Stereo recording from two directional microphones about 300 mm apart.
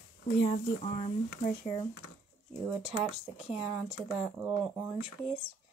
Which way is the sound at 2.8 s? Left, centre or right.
Centre.